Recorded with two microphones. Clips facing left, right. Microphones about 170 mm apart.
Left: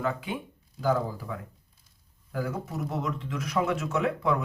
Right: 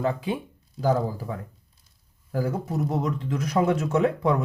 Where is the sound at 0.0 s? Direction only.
30° right (ahead or behind).